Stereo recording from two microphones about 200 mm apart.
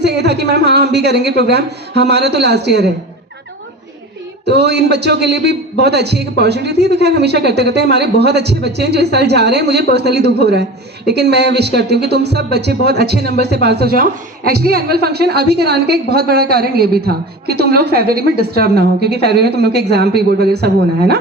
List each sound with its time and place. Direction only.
0.0 s a man's voice: 55° right (ahead or behind)
4.4 s a man's voice: 55° right (ahead or behind)